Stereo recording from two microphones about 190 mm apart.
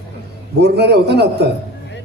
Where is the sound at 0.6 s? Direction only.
60° right (ahead or behind).